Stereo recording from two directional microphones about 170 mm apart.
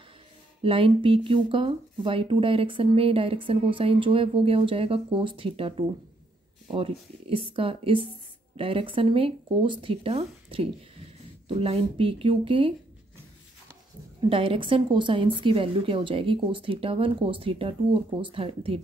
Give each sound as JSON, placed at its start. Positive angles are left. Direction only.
{"t": 0.6, "sound": "speech", "side_deg": -30}
{"t": 14.3, "sound": "speech", "side_deg": -35}